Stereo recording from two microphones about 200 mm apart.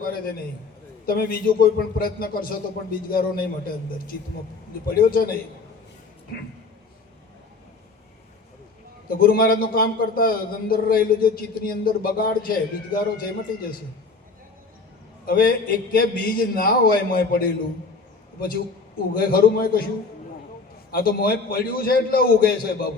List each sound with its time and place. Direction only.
0.0 s a man's voice: 45° left (ahead or behind)
4.9 s a man's voice: 50° left (ahead or behind)
9.0 s a man's voice: 45° left (ahead or behind)
15.3 s a man's voice: 50° left (ahead or behind)
20.9 s a man's voice: 45° left (ahead or behind)